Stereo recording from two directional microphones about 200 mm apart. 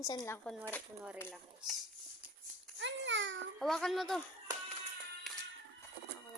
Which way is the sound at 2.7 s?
65° right (ahead or behind).